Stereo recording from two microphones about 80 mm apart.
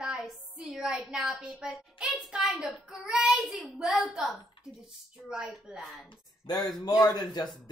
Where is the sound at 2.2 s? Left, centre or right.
Centre.